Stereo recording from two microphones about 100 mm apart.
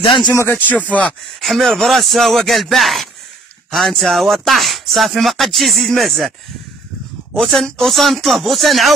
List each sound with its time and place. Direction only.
0.0 s speech: 50° left (ahead or behind)
0.3 s speech: 25° left (ahead or behind)
1.4 s speech: centre (ahead or behind)
7.3 s speech: centre (ahead or behind)